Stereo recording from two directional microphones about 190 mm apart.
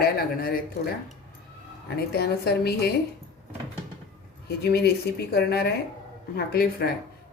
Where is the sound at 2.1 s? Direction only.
55° left (ahead or behind).